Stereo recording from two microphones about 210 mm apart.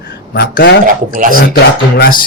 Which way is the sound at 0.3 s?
50° left (ahead or behind).